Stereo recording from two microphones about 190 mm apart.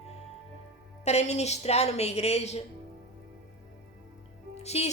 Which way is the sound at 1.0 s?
35° left (ahead or behind).